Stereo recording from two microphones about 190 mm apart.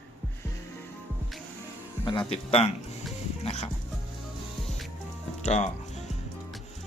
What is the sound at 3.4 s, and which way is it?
Music, 30° left (ahead or behind).